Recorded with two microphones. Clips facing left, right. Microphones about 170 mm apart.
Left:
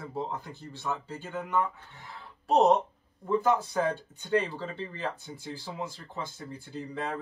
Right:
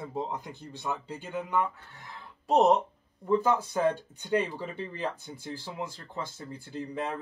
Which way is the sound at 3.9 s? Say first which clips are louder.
Even; 15° right (ahead or behind).